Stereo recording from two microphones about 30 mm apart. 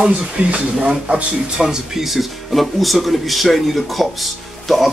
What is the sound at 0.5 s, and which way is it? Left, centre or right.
Speech, right.